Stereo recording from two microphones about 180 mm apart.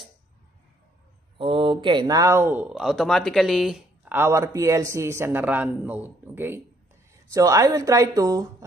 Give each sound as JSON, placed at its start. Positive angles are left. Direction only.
{"t": 1.4, "sound": "speech", "side_deg": -30}
{"t": 2.7, "sound": "speech", "side_deg": 0}
{"t": 4.1, "sound": "speech", "side_deg": -15}